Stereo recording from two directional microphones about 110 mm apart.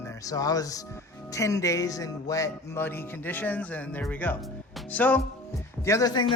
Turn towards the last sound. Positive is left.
turn(degrees=35)  # may be behind; listen again after turning